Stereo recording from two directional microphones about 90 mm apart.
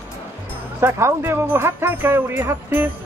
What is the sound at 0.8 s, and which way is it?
Speech, 30° right (ahead or behind).